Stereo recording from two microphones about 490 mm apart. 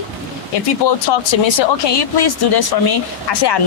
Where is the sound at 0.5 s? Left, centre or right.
Left.